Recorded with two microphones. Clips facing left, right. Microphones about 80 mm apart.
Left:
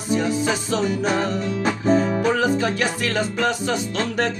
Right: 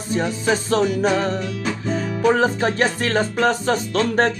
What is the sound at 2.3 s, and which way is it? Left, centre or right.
Music, right.